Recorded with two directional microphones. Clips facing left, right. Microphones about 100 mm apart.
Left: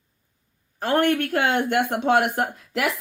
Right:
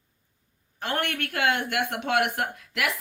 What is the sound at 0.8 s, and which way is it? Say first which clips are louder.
A woman's voice: left 9 dB; 40° left (ahead or behind).